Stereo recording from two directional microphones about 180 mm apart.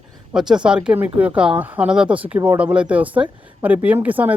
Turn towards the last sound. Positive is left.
turn(degrees=-10)  # may be behind; listen again after turning